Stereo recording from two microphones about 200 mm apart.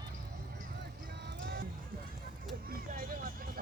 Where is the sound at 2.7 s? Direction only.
45° right (ahead or behind).